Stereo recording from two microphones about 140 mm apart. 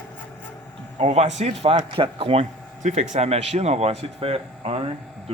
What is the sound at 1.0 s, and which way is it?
Speech, 55° right (ahead or behind).